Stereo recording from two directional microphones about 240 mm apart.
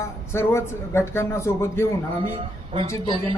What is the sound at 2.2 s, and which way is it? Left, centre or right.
Speech, right.